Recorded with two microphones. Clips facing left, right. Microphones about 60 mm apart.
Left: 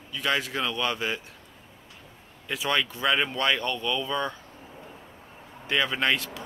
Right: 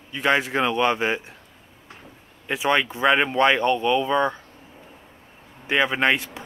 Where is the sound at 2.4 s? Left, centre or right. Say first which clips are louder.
Right 5 dB; right.